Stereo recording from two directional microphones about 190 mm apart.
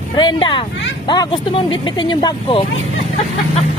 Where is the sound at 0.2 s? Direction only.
25° left (ahead or behind).